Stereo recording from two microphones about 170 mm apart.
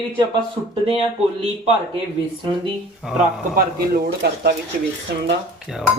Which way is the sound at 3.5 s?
65° right (ahead or behind).